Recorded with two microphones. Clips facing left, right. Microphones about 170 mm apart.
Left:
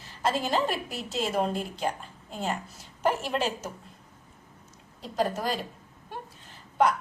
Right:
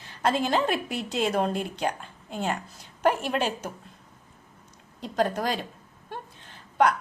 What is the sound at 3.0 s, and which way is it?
Speech, 55° right (ahead or behind).